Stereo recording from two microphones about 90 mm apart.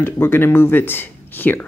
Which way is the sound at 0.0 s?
25° left (ahead or behind).